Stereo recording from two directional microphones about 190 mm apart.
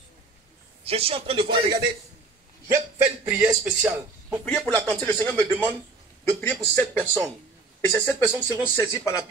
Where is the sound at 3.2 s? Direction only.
10° right (ahead or behind).